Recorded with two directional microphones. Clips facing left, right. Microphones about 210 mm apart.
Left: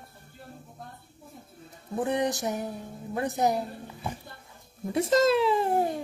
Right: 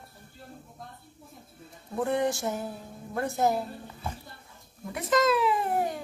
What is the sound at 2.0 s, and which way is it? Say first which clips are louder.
A child's voice: even; 20° left (ahead or behind).